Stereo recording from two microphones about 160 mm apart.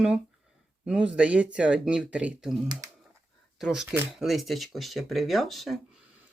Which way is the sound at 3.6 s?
5° right (ahead or behind).